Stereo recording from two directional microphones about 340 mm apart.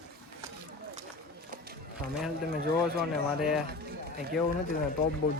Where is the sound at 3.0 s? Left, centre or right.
Centre.